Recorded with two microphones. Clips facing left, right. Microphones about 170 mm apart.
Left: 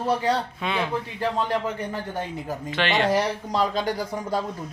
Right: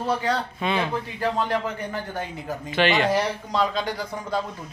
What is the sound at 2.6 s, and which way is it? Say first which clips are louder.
Speech: right 2 dB; 5° right (ahead or behind).